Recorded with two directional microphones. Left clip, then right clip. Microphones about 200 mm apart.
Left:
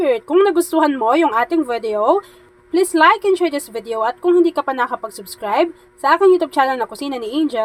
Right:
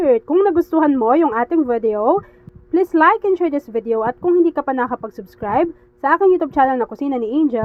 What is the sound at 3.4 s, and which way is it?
Speech, 15° right (ahead or behind).